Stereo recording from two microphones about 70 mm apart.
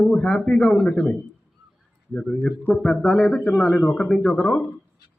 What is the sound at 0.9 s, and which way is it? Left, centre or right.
Speech, left.